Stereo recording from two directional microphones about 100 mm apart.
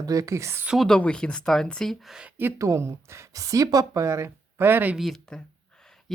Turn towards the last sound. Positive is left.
turn(degrees=0)  # may be behind; listen again after turning